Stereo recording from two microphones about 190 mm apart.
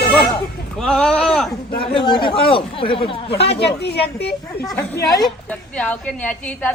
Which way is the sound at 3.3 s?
65° left (ahead or behind).